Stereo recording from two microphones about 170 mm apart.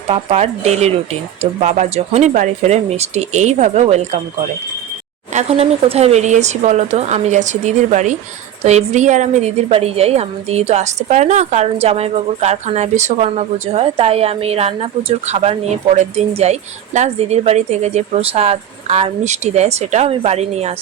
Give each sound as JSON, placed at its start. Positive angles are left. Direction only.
{"t": 0.1, "sound": "a woman's voice", "side_deg": -35}
{"t": 5.3, "sound": "a woman's voice", "side_deg": -40}